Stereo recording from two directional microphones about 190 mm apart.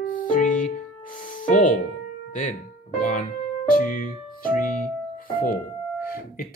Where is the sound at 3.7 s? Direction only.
45° left (ahead or behind).